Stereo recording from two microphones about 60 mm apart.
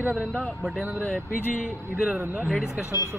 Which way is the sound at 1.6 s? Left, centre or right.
Centre.